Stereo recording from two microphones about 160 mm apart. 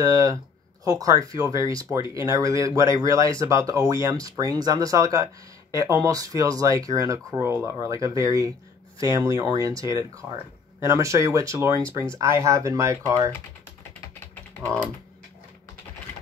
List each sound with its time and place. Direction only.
0.0 s speech: 20° right (ahead or behind)